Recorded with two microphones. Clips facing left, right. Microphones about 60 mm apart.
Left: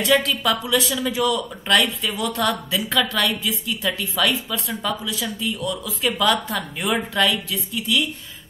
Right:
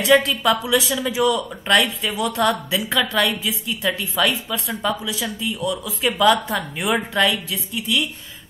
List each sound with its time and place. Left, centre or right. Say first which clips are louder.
0.0 s speech: right 3 dB; centre